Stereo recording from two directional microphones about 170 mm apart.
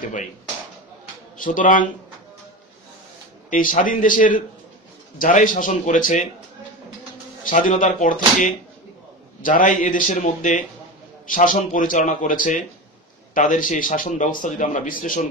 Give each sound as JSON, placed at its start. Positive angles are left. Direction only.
{"t": 1.4, "sound": "speech", "side_deg": 55}
{"t": 3.4, "sound": "speech", "side_deg": 50}
{"t": 7.4, "sound": "speech", "side_deg": 50}